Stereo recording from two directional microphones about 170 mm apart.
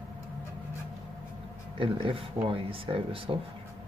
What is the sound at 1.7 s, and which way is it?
Speech, 30° right (ahead or behind).